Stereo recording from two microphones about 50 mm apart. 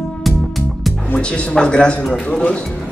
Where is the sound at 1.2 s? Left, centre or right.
Centre.